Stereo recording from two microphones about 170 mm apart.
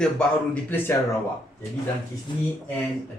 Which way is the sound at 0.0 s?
5° left (ahead or behind).